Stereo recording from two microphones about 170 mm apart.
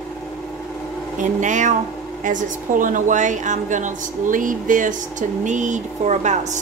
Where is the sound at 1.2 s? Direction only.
45° right (ahead or behind).